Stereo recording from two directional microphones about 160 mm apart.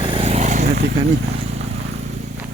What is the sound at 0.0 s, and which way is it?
Vehicle, 35° right (ahead or behind).